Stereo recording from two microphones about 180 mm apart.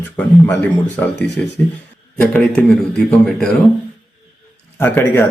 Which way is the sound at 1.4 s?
10° left (ahead or behind).